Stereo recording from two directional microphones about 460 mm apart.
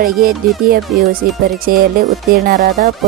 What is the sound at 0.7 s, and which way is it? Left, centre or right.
Speech, centre.